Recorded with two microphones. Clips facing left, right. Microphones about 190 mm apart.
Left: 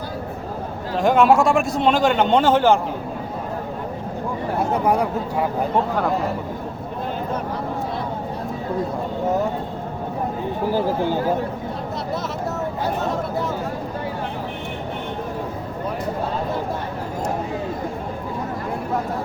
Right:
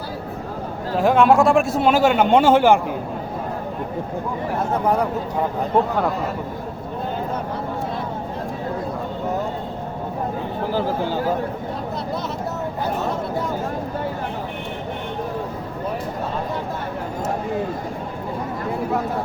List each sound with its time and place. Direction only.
0.9 s a man's voice: centre (ahead or behind)